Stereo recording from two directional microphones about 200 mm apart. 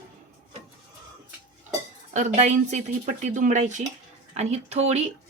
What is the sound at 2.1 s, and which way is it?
A woman's voice, 35° right (ahead or behind).